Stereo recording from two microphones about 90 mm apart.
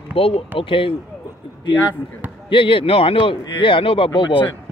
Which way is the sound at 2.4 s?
70° left (ahead or behind).